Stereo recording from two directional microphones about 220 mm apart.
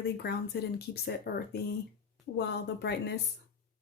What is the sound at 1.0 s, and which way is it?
Speech, 45° left (ahead or behind).